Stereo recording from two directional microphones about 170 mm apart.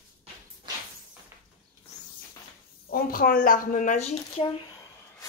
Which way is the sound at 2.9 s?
60° left (ahead or behind).